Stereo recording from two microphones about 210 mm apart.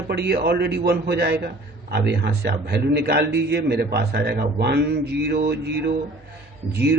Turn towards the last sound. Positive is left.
turn(degrees=-50)  # may be behind; listen again after turning